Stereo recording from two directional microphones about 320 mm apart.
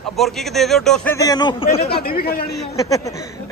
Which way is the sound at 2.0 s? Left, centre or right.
Left.